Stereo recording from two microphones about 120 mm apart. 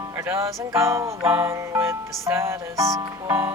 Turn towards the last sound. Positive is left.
turn(degrees=-25)  # may be behind; listen again after turning